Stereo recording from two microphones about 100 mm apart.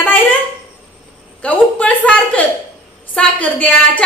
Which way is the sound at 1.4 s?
15° left (ahead or behind).